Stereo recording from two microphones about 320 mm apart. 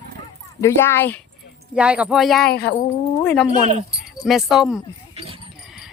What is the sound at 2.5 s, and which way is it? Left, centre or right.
Speech, left.